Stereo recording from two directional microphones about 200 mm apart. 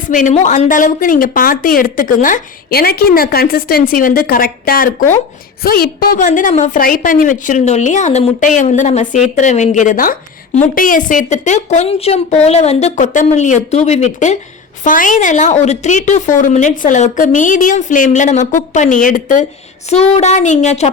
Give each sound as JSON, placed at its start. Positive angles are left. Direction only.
{"t": 0.1, "sound": "a woman's voice", "side_deg": 40}